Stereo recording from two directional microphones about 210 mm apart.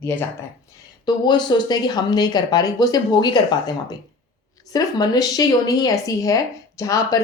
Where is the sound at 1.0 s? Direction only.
20° left (ahead or behind).